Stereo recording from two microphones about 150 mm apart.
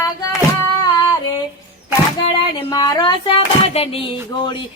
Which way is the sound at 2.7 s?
25° left (ahead or behind).